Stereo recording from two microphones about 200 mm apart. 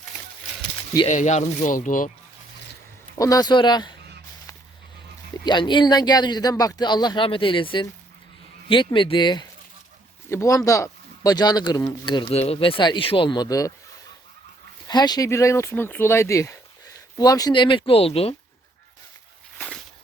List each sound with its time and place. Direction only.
1.0 s speech: 35° left (ahead or behind)
3.2 s speech: 15° left (ahead or behind)
5.5 s speech: 25° left (ahead or behind)
14.8 s speech: 20° left (ahead or behind)
19.5 s a sound: 5° left (ahead or behind)